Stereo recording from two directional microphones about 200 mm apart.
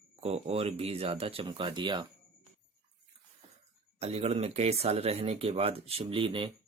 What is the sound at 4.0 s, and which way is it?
Speech, 30° right (ahead or behind).